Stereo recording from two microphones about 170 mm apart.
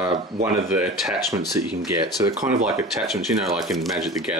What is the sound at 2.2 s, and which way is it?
Speech, 20° right (ahead or behind).